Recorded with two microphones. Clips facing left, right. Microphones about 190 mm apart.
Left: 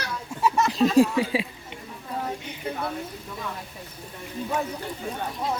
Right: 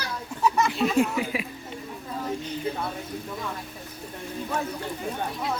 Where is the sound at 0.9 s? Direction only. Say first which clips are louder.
Left 4 dB; 30° left (ahead or behind).